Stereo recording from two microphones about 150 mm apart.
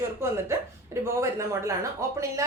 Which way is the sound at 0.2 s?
15° right (ahead or behind).